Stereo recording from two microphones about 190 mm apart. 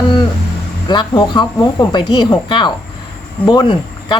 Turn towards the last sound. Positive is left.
turn(degrees=20)  # may be behind; listen again after turning